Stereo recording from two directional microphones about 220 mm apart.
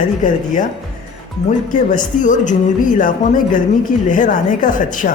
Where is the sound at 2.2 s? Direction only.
35° left (ahead or behind).